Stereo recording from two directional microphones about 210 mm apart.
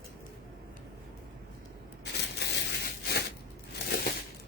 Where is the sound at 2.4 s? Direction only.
55° left (ahead or behind).